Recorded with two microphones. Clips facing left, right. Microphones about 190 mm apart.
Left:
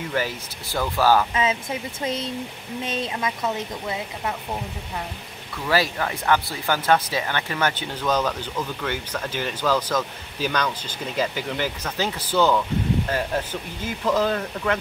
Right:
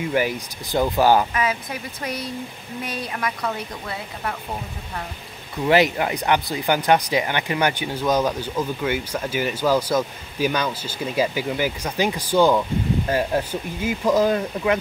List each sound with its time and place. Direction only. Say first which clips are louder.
0.1 s speech: right 3 dB; 15° right (ahead or behind)
1.3 s speech: left 1 dB; 25° left (ahead or behind)
5.7 s speech: right 5 dB; 20° right (ahead or behind)